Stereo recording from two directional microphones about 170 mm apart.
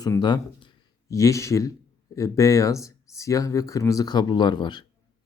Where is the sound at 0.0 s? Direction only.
25° left (ahead or behind).